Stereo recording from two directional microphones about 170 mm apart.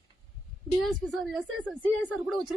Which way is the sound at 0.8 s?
Centre (ahead or behind).